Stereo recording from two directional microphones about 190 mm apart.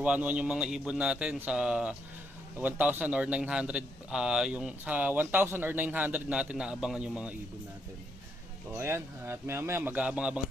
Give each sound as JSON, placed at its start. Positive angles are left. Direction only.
{"t": 0.0, "sound": "a man's voice", "side_deg": -5}
{"t": 8.7, "sound": "a man's voice", "side_deg": -10}